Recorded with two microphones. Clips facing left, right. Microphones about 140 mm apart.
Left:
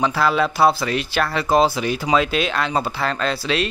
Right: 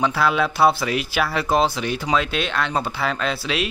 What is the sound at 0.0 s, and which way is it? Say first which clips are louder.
Speech: left 1 dB; centre (ahead or behind).